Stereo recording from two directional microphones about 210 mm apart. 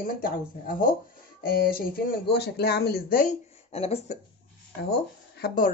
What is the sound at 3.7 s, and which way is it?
Speech, 30° left (ahead or behind).